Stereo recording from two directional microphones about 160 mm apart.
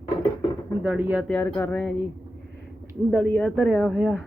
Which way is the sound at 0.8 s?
10° right (ahead or behind).